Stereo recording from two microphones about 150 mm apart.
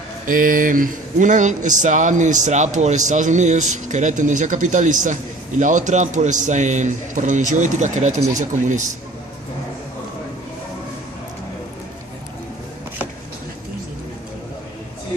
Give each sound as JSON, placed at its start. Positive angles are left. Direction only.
{"t": 0.3, "sound": "speech", "side_deg": -65}